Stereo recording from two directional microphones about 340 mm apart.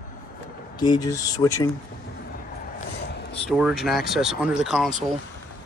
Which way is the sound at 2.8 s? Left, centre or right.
Left.